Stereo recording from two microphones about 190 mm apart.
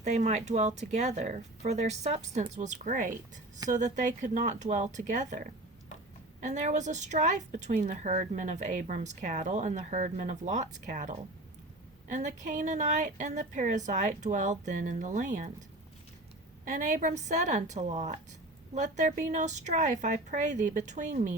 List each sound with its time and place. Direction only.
0.0 s a woman's voice: 40° right (ahead or behind)
16.6 s a woman's voice: 40° right (ahead or behind)